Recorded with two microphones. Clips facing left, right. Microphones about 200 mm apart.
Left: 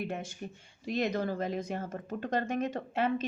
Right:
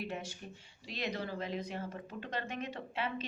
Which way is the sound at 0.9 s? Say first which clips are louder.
Left 8 dB; 50° left (ahead or behind).